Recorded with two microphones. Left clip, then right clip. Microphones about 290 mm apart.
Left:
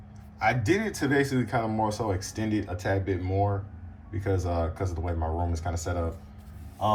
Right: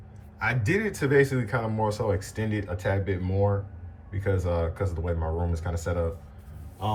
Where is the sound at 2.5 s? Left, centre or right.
Centre.